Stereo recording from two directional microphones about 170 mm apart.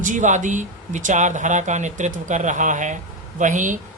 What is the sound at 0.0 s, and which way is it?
Speech, 50° right (ahead or behind).